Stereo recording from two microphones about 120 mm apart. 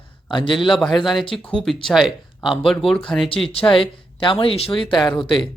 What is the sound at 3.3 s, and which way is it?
Speech, 50° left (ahead or behind).